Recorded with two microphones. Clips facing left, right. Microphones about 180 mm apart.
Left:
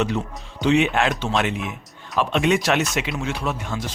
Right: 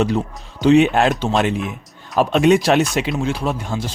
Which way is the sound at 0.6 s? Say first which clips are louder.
Right 6 dB; 35° right (ahead or behind).